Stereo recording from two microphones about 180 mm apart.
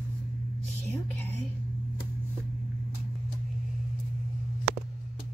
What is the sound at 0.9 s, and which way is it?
Speech, 10° left (ahead or behind).